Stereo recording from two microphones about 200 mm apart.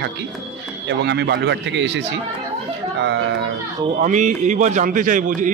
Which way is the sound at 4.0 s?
40° right (ahead or behind).